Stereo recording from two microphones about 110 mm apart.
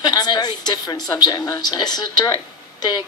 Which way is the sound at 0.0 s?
35° left (ahead or behind).